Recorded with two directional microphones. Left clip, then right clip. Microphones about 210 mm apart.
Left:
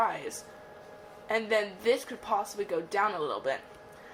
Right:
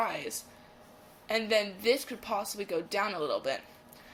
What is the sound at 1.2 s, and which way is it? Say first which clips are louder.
Speech: even; 20° right (ahead or behind).